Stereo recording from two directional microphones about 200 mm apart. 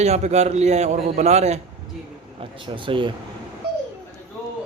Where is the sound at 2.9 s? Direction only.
25° right (ahead or behind).